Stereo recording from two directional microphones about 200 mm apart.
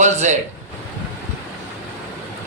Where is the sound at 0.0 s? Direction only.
35° right (ahead or behind).